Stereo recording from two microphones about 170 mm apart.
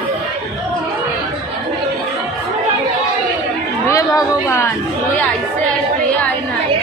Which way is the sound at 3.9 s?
20° left (ahead or behind).